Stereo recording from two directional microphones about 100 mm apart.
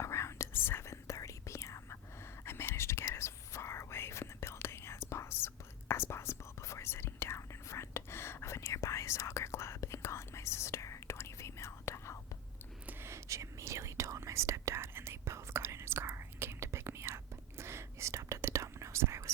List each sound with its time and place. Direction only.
0.0 s whispering: 30° left (ahead or behind)
12.8 s whispering: 20° right (ahead or behind)